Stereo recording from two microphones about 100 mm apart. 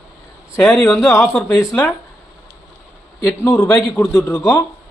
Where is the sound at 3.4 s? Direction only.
25° left (ahead or behind).